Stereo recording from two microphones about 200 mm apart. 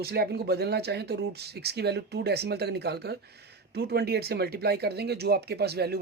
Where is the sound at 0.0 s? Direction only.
50° right (ahead or behind).